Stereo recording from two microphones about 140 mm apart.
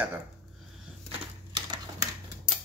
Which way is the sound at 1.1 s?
30° right (ahead or behind).